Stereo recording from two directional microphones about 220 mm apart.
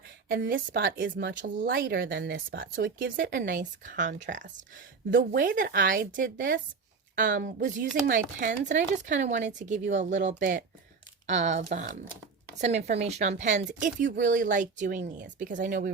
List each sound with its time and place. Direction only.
0.3 s speech: 40° right (ahead or behind)